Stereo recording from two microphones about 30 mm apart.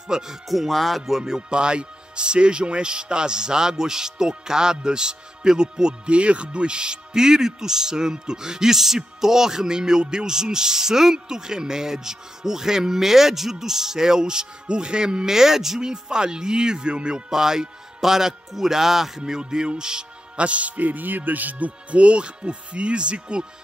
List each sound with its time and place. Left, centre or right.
0.1 s a man's voice: centre
0.5 s speech: centre
1.5 s a man's voice: right
6.0 s a man's voice: right; by 15.8 s centre
15.8 s a man's voice: right
17.3 s a man's voice: centre
19.2 s a man's voice: right
20.3 s speech: right
20.7 s speech: right
22.0 s speech: right